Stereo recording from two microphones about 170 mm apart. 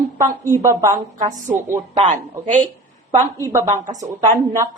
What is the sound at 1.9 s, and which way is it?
Speech, 45° right (ahead or behind).